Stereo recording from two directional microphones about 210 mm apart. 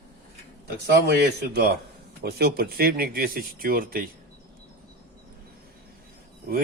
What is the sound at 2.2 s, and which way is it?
Speech, 50° right (ahead or behind).